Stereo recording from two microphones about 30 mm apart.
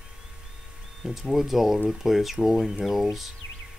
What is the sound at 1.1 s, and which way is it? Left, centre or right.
Speech, centre.